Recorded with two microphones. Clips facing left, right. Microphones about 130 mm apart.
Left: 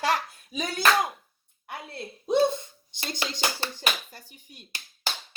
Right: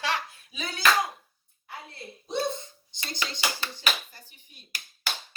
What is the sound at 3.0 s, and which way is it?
Speech, 40° left (ahead or behind).